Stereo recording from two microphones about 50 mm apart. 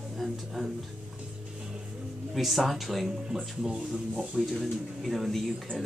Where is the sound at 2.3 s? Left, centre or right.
Centre.